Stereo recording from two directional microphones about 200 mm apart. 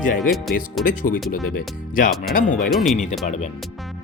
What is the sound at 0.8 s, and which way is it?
Speech, 45° left (ahead or behind).